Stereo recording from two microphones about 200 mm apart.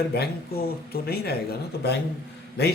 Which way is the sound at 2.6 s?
55° left (ahead or behind).